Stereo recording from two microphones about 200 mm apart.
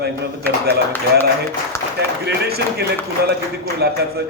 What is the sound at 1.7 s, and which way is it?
Speech, 15° left (ahead or behind).